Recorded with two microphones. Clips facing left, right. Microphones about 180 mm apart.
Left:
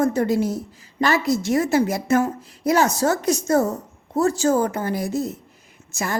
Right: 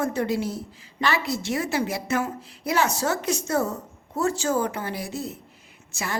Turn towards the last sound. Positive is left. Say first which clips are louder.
# left 5 dB
turn(degrees=45)  # may be behind; listen again after turning